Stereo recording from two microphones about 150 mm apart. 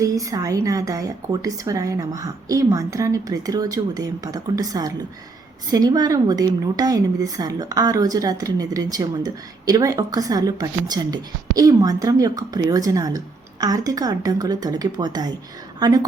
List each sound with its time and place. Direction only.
0.0 s a woman's voice: 25° right (ahead or behind)